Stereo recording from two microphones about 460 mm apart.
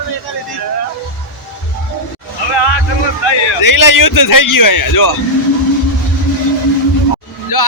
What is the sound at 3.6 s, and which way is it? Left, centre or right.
A man's voice, left.